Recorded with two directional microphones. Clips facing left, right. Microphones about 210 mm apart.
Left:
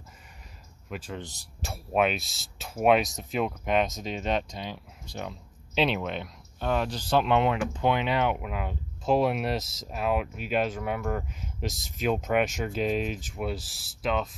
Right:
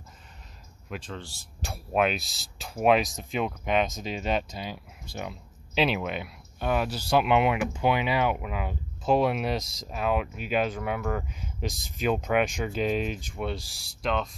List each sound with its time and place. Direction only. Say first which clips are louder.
0.8 s speech: even; 5° left (ahead or behind)
1.1 s speech: left 2 dB; 15° left (ahead or behind)
1.6 s speech: even; centre (ahead or behind)